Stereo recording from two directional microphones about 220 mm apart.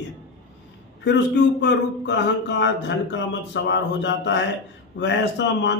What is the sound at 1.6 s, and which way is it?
Speech, 50° left (ahead or behind).